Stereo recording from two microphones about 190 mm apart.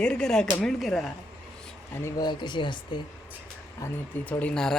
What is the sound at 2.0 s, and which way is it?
Speech, 25° left (ahead or behind).